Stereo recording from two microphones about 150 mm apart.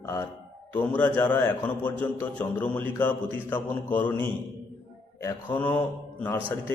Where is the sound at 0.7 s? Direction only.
10° left (ahead or behind).